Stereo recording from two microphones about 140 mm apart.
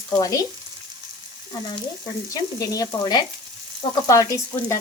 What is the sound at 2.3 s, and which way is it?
Speech, 25° left (ahead or behind).